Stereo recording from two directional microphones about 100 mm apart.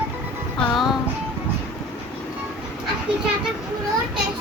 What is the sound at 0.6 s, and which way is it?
Music, centre (ahead or behind).